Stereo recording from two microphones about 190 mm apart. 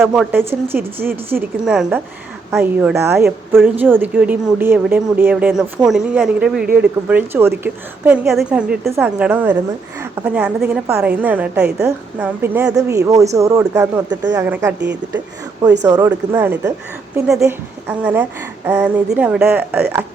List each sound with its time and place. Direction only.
0.0 s a woman's voice: 5° right (ahead or behind); by 14.4 s 20° right (ahead or behind)
14.4 s a woman's voice: 10° right (ahead or behind)
15.8 s a woman's voice: 20° right (ahead or behind)